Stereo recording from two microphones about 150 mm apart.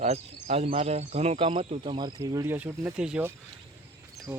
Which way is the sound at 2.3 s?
20° right (ahead or behind).